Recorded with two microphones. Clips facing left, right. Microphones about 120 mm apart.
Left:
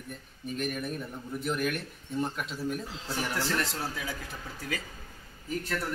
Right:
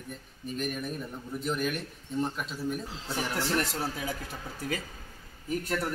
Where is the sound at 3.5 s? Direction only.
15° right (ahead or behind).